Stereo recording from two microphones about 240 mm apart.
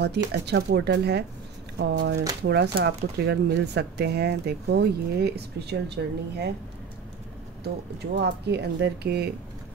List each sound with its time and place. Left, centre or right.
0.3 s speech: right
7.6 s speech: right